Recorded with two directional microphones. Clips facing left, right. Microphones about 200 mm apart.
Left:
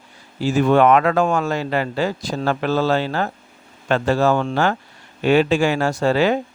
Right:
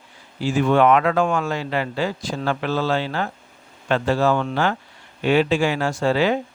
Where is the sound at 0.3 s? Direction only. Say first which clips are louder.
Left 2 dB; 40° left (ahead or behind).